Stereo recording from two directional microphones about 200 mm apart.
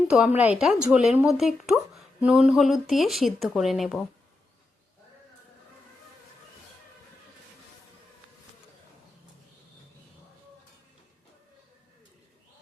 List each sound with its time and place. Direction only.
0.1 s speech: 5° right (ahead or behind)